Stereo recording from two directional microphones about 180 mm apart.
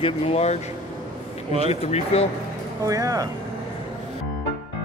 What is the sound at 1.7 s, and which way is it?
Speech, 35° left (ahead or behind).